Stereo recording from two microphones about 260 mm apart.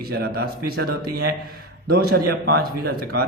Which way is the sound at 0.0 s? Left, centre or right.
Right.